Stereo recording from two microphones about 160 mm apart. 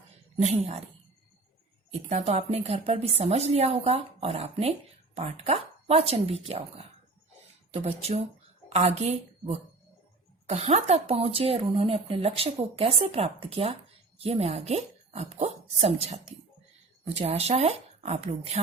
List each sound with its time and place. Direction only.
0.4 s a woman's voice: 40° right (ahead or behind)
1.9 s a woman's voice: 45° right (ahead or behind)